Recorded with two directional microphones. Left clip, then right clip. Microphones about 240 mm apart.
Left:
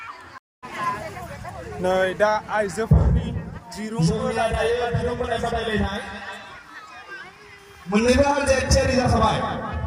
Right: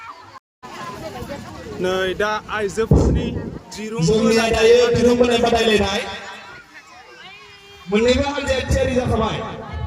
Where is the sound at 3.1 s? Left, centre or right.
Centre.